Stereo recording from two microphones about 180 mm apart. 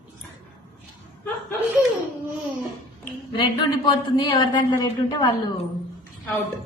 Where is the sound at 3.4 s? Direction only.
25° left (ahead or behind).